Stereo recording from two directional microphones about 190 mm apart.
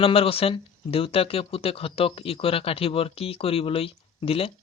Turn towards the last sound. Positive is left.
turn(degrees=30)  # may be behind; listen again after turning